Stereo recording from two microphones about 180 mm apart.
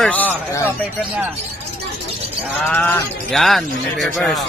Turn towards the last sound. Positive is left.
turn(degrees=0)  # may be behind; listen again after turning